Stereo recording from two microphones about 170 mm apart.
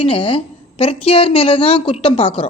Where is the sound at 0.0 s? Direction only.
30° left (ahead or behind).